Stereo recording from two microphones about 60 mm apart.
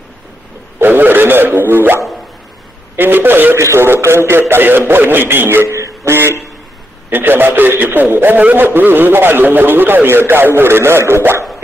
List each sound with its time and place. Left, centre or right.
0.7 s a sound: right
3.0 s speech: right
3.7 s speech: right
7.1 s a man's voice: right
8.6 s speech: right